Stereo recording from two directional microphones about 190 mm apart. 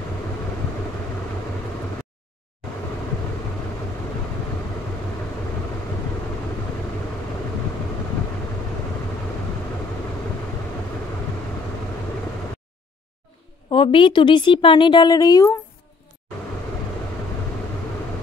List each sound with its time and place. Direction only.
13.7 s a woman's voice: 25° left (ahead or behind)